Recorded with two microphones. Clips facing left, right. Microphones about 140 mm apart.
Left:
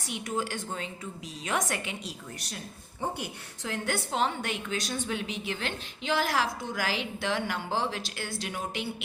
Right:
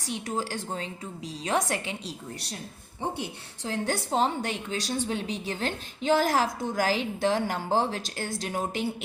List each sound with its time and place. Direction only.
0.0 s a woman's voice: 35° right (ahead or behind)